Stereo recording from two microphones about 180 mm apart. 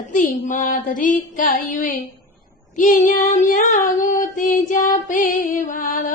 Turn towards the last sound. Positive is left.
turn(degrees=50)  # may be behind; listen again after turning